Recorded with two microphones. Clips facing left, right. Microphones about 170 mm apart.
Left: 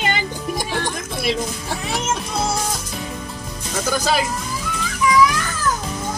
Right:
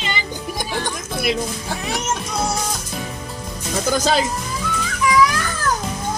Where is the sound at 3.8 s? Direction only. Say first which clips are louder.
Right 2 dB; 20° right (ahead or behind).